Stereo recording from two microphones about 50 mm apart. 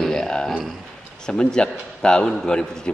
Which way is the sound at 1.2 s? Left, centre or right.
Centre.